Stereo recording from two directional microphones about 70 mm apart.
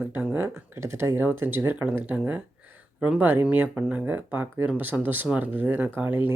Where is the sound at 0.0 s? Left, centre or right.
Right; by 4.0 s centre.